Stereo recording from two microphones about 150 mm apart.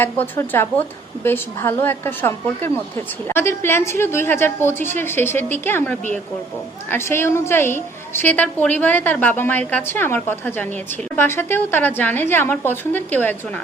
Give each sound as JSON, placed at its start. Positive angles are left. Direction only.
{"t": 0.0, "sound": "a woman's voice", "side_deg": 15}